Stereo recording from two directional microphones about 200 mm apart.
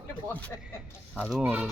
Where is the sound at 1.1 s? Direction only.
Centre (ahead or behind).